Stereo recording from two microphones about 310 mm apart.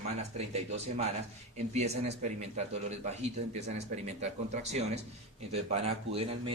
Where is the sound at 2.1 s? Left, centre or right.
Right.